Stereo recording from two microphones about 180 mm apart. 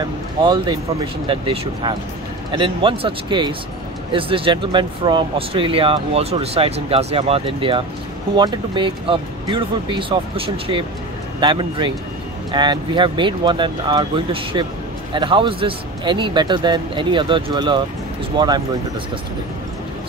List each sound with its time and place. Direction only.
0.4 s speech: 25° right (ahead or behind)